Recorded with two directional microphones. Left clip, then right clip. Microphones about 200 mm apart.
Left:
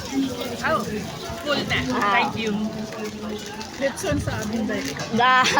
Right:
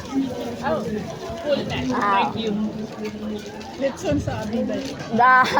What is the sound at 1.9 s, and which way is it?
Speech, 15° left (ahead or behind).